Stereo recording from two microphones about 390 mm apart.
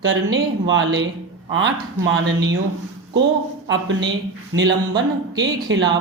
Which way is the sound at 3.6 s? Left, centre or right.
Right.